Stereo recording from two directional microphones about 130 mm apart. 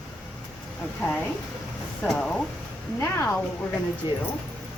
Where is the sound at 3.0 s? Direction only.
20° left (ahead or behind).